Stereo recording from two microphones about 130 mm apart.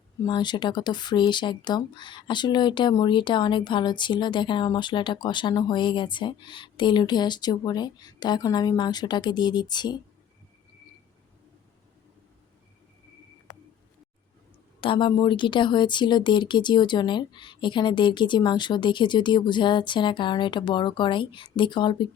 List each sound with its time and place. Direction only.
0.3 s speech: 35° left (ahead or behind)
14.8 s speech: 40° left (ahead or behind)